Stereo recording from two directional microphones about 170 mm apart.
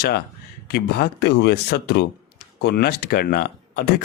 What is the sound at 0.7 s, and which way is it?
Speech, 65° left (ahead or behind).